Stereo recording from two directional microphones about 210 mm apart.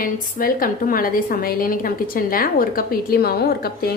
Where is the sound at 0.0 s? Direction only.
40° left (ahead or behind).